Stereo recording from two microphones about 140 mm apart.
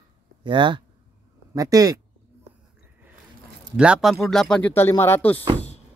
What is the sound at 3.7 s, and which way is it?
Speech, 5° right (ahead or behind).